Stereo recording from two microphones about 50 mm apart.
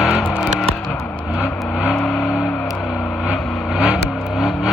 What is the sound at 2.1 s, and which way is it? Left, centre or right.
Music, left.